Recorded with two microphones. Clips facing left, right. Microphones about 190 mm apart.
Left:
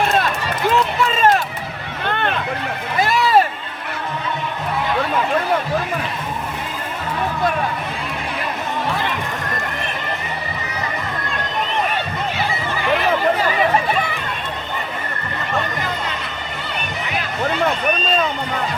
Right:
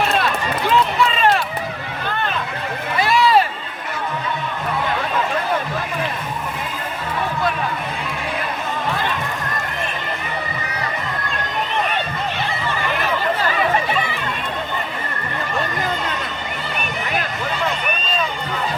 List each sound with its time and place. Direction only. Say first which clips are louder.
3.0 s run: even; 45° left (ahead or behind)